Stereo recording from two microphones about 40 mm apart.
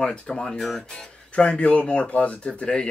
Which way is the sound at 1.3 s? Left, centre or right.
Left.